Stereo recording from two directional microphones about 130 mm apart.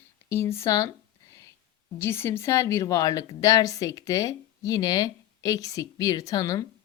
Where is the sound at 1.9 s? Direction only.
20° left (ahead or behind).